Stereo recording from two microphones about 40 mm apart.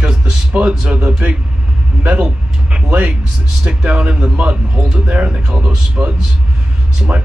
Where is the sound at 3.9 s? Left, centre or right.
Right.